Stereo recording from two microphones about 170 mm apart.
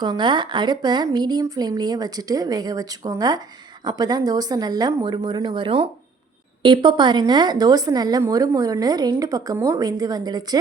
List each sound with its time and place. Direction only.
0.0 s a woman's voice: 25° right (ahead or behind)